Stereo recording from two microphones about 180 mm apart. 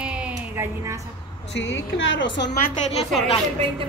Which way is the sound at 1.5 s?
90° left.